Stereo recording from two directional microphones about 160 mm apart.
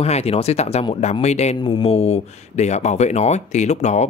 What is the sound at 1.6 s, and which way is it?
Speech, 35° left (ahead or behind).